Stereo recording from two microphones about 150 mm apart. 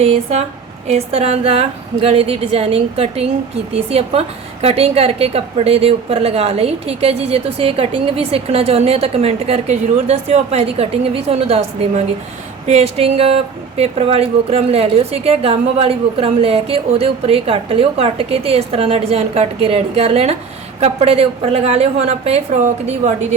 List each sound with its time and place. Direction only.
0.0 s a woman's voice: 45° right (ahead or behind)